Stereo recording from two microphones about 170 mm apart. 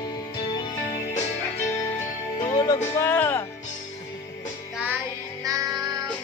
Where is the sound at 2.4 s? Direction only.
20° left (ahead or behind).